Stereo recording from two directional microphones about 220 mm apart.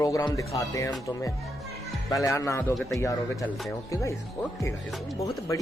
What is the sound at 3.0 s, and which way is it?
Speech, 15° left (ahead or behind).